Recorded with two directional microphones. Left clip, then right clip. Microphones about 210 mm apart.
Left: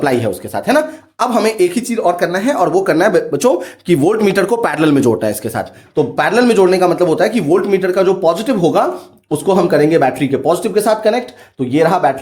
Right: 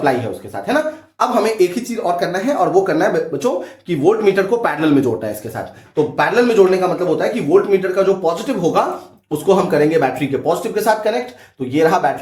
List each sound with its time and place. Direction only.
0.0 s speech: 55° left (ahead or behind); by 3.1 s 35° left (ahead or behind)
3.3 s speech: 55° left (ahead or behind)